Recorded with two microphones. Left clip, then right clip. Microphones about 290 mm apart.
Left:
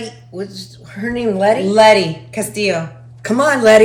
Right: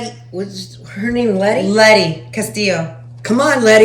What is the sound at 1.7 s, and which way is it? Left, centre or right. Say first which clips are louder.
Speech: right 1 dB; centre.